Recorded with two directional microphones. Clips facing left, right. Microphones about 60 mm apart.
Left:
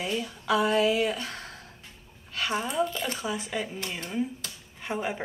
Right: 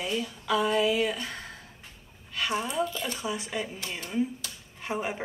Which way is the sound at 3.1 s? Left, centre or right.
Centre.